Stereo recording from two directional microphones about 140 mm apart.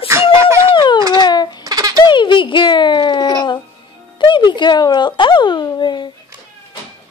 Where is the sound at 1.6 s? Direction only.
25° right (ahead or behind).